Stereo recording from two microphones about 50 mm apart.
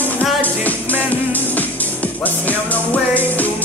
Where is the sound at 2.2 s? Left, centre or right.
Left.